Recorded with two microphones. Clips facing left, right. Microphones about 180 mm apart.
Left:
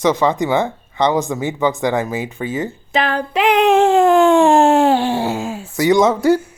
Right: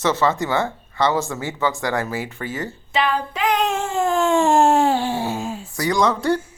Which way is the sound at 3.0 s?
65° left (ahead or behind).